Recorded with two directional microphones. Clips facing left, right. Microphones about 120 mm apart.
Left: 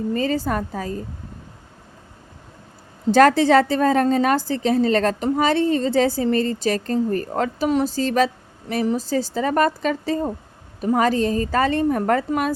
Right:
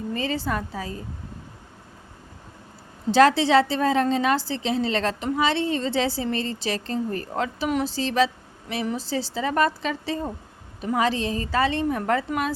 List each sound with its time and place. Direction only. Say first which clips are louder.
0.1 s a woman's voice: left 4 dB; 45° left (ahead or behind)
3.1 s a woman's voice: left 3 dB; 50° left (ahead or behind)